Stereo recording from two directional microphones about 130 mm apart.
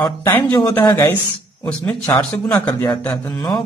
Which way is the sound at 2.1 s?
10° left (ahead or behind).